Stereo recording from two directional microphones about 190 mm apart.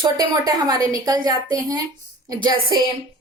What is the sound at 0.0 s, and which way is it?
A woman's voice, 20° right (ahead or behind).